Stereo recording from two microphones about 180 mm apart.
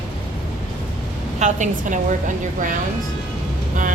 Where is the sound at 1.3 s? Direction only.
40° right (ahead or behind).